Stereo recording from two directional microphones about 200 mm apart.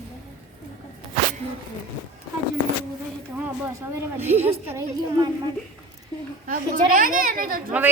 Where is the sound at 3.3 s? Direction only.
10° right (ahead or behind).